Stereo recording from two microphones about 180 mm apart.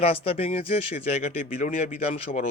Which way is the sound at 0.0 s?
30° left (ahead or behind).